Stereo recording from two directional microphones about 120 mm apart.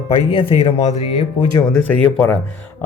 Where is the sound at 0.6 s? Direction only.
60° left (ahead or behind).